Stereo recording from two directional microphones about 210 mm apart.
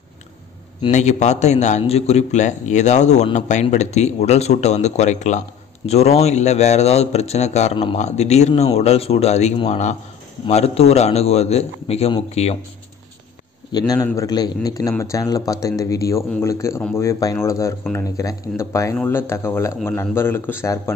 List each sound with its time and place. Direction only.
0.8 s a man's voice: 35° left (ahead or behind)
13.7 s a man's voice: 20° left (ahead or behind)